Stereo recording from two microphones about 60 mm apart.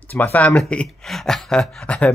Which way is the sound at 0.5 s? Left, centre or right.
Centre.